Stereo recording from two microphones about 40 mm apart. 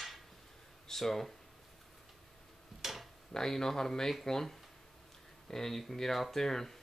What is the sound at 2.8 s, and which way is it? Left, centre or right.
Tick-tock, centre.